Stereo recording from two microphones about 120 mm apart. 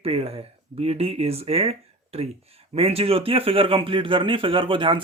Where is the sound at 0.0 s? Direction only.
55° right (ahead or behind).